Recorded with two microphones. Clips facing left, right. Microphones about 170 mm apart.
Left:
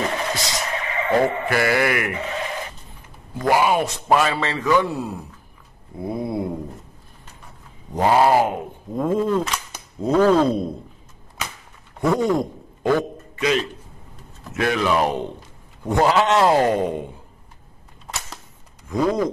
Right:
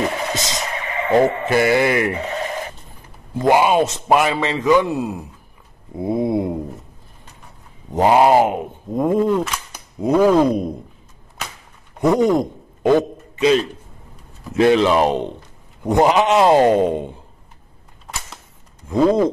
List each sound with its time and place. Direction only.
0.3 s speech: 20° right (ahead or behind)
3.3 s a man's voice: 20° right (ahead or behind)
7.9 s a man's voice: 20° right (ahead or behind)
12.0 s a sound: 20° right (ahead or behind)
14.5 s a man's voice: 25° right (ahead or behind)
18.9 s a man's voice: 25° right (ahead or behind)